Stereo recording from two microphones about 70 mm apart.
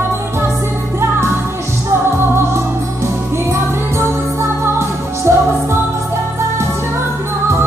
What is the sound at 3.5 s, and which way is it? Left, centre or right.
Music, right.